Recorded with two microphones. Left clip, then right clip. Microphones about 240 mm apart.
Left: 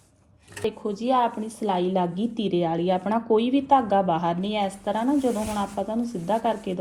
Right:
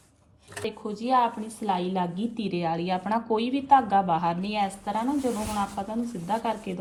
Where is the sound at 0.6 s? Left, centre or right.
Right.